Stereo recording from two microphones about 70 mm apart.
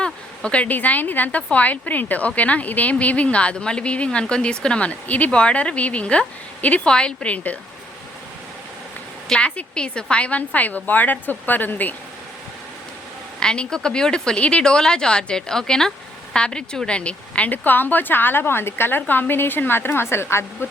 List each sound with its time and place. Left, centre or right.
0.0 s a woman's voice: centre
9.3 s a woman's voice: centre
13.4 s a woman's voice: centre; by 20.7 s left